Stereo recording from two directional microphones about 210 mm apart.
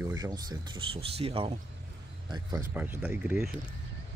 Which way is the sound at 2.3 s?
15° right (ahead or behind).